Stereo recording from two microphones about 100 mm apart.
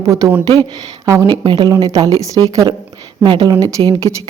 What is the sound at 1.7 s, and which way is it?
Speech, 35° right (ahead or behind).